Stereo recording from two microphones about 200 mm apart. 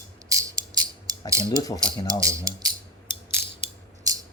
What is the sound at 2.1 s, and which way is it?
Speech, 15° right (ahead or behind).